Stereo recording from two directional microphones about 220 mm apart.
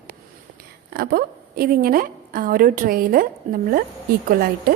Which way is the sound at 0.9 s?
40° right (ahead or behind).